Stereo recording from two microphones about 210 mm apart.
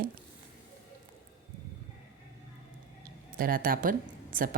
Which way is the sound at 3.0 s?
45° right (ahead or behind).